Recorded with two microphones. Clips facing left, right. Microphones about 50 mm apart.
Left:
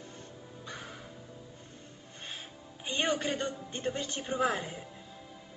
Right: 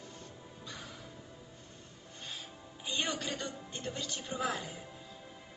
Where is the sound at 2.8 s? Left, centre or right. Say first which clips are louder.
Left 5 dB; left.